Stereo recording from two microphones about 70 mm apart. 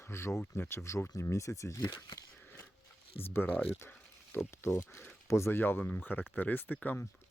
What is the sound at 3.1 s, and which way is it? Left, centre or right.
Speech, left.